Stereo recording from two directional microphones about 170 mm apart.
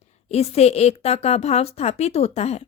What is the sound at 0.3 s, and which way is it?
A woman's voice, 40° left (ahead or behind).